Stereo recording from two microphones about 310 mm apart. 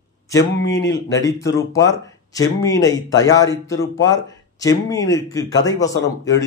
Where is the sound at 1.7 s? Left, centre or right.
Centre.